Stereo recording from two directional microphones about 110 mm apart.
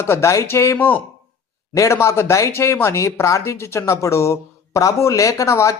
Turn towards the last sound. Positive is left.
turn(degrees=25)  # may be behind; listen again after turning